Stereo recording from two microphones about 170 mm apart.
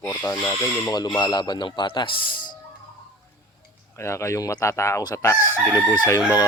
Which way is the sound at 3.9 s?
15° left (ahead or behind).